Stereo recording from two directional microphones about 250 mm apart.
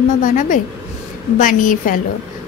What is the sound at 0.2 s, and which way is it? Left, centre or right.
A woman's voice, left.